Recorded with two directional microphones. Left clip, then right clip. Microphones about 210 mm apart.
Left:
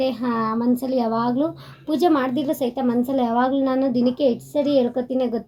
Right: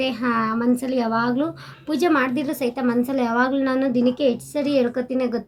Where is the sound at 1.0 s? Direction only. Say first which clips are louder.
Right 1 dB; 20° right (ahead or behind).